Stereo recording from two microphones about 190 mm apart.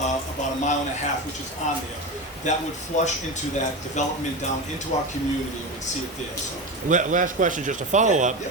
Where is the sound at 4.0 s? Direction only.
40° left (ahead or behind).